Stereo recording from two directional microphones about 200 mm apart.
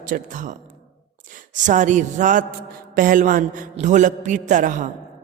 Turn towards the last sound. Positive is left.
turn(degrees=-40)  # may be behind; listen again after turning